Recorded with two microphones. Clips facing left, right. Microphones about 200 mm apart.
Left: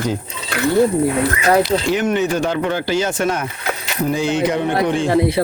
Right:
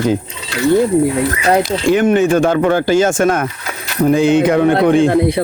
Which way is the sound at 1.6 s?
50° right (ahead or behind).